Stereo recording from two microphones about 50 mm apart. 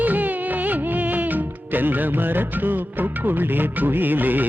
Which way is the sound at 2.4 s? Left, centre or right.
Right.